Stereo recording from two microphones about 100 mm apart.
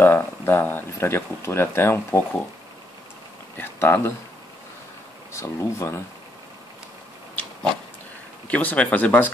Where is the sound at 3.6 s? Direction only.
25° left (ahead or behind).